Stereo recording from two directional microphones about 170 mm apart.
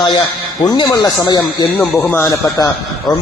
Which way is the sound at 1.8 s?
10° left (ahead or behind).